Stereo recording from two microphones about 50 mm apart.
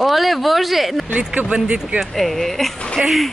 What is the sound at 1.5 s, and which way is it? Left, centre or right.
Speech, centre.